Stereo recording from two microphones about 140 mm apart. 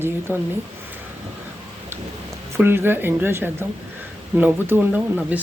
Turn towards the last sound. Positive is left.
turn(degrees=-10)  # may be behind; listen again after turning